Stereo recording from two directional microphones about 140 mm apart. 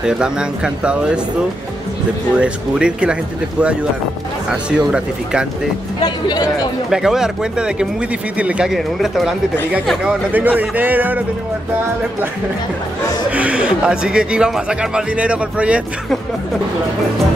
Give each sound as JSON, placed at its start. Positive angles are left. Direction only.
{"t": 0.0, "sound": "speech", "side_deg": -5}
{"t": 2.3, "sound": "speech", "side_deg": -5}
{"t": 4.5, "sound": "speech", "side_deg": -5}
{"t": 6.0, "sound": "speech", "side_deg": 30}
{"t": 6.9, "sound": "speech", "side_deg": -5}
{"t": 10.3, "sound": "speech", "side_deg": -10}
{"t": 13.3, "sound": "speech", "side_deg": -10}